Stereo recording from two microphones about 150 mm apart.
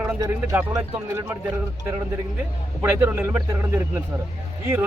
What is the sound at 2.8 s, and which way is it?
Speech, 15° right (ahead or behind).